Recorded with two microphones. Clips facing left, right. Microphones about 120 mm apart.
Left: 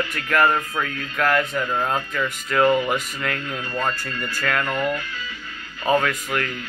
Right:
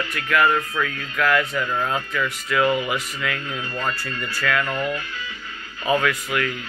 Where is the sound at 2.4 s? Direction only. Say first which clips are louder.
Left 3 dB; 40° left (ahead or behind).